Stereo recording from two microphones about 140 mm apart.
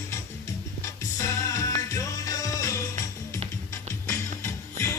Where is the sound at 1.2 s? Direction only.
20° left (ahead or behind).